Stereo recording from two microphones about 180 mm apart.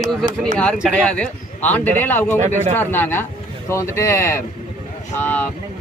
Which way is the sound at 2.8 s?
10° left (ahead or behind).